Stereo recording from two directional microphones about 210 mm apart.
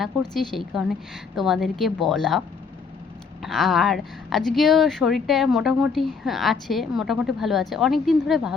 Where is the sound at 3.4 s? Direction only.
Centre (ahead or behind).